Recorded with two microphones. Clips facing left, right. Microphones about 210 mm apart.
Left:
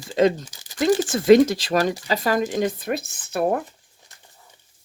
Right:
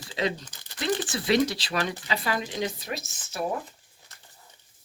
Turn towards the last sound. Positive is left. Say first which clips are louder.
# left 8 dB
turn(degrees=55)  # may be behind; listen again after turning